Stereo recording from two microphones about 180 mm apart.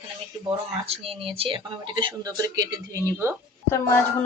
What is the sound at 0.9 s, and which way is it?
A woman's voice, 35° right (ahead or behind).